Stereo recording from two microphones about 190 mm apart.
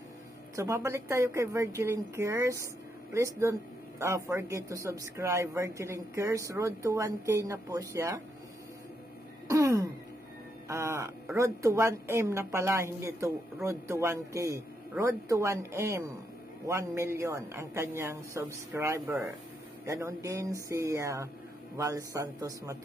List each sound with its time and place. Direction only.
0.6 s speech: 15° right (ahead or behind)
9.5 s a sound: 15° right (ahead or behind)
10.7 s speech: 15° right (ahead or behind)